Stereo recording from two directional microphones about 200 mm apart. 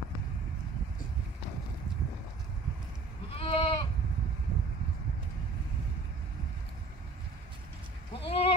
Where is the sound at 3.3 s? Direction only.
30° left (ahead or behind).